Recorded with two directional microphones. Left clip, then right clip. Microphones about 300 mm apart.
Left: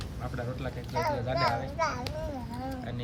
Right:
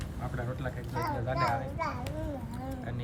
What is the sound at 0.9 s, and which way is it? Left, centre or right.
A child's voice, left.